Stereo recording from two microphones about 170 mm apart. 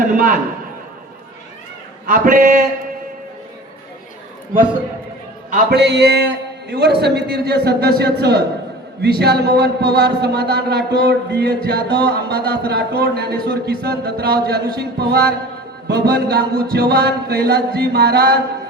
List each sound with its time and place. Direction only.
0.0 s a sound: 50° right (ahead or behind)
2.0 s a man's voice: 50° right (ahead or behind)
5.7 s mantra: 85° right
6.7 s a man's voice: 70° right (ahead or behind)